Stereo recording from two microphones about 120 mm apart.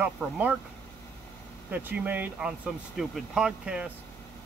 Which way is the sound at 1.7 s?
15° right (ahead or behind).